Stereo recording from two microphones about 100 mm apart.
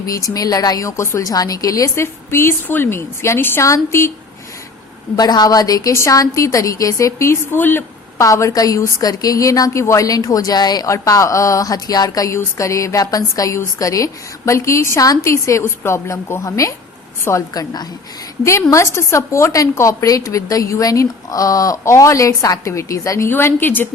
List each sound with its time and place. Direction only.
0.0 s a woman's voice: 35° left (ahead or behind)
5.1 s a woman's voice: 40° left (ahead or behind); by 7.9 s 20° left (ahead or behind)
8.2 s a woman's voice: 30° left (ahead or behind)